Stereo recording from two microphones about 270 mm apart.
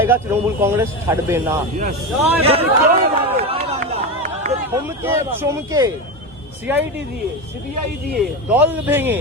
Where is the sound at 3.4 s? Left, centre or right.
Right.